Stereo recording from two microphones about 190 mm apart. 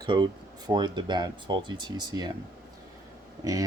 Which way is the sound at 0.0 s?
25° right (ahead or behind).